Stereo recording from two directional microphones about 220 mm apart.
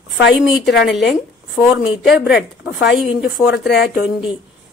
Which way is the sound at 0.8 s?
Centre (ahead or behind).